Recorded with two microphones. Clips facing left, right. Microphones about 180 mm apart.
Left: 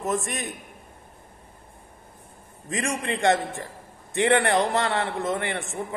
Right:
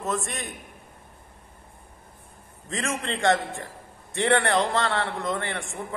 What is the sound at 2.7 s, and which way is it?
A man's voice, 15° left (ahead or behind).